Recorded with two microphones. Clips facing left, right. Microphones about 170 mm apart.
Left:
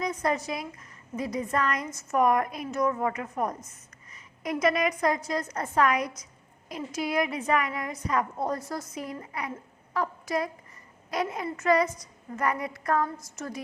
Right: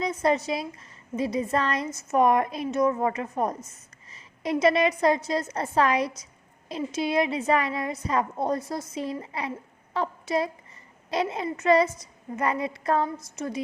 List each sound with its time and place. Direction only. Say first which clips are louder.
0.0 s a woman's voice: right 4 dB; 25° right (ahead or behind)